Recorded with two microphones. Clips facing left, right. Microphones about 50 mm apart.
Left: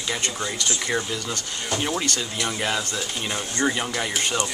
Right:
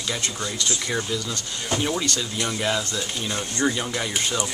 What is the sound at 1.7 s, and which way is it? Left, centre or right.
Speech, centre.